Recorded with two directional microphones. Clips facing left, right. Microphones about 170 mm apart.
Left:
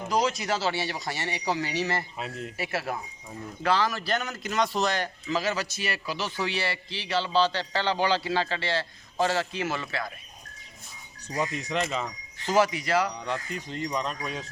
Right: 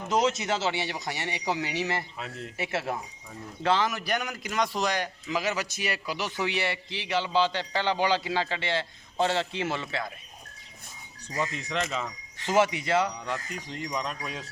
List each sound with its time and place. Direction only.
0.1 s a man's voice: 25° right (ahead or behind)
11.3 s speech: 5° left (ahead or behind)
12.5 s speech: 25° right (ahead or behind)
13.2 s speech: 5° right (ahead or behind)